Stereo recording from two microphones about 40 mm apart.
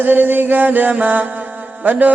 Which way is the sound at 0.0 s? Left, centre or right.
Right.